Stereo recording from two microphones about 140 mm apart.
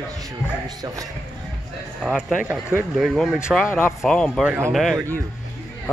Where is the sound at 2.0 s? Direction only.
Centre (ahead or behind).